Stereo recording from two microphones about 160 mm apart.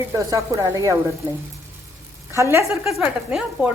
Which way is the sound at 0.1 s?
20° right (ahead or behind).